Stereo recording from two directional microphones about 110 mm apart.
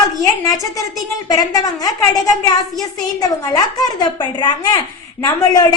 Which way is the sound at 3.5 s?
35° left (ahead or behind).